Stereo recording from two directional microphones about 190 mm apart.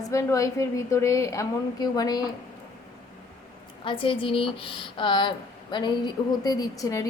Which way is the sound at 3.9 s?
25° left (ahead or behind).